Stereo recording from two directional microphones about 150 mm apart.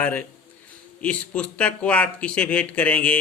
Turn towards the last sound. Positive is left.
turn(degrees=10)  # may be behind; listen again after turning